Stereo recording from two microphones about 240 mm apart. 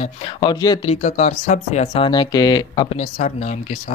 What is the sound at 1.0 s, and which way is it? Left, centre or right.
Speech, left.